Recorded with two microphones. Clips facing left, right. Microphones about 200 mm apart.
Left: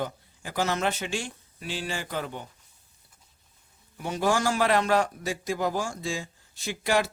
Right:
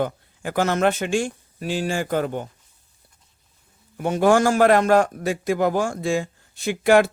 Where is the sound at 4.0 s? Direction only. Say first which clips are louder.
Right 8 dB; 55° right (ahead or behind).